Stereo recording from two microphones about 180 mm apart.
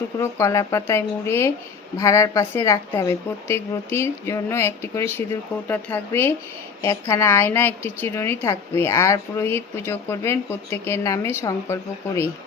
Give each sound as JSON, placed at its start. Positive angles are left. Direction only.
{"t": 0.2, "sound": "a woman's voice", "side_deg": 15}